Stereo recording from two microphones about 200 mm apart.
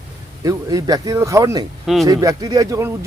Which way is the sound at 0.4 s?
20° right (ahead or behind).